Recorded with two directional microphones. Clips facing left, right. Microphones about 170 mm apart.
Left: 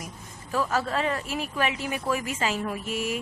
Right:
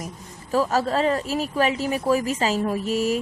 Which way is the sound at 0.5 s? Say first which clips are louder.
Right 5 dB; 35° right (ahead or behind).